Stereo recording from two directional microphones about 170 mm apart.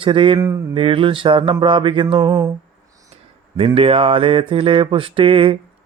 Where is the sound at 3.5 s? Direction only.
35° right (ahead or behind).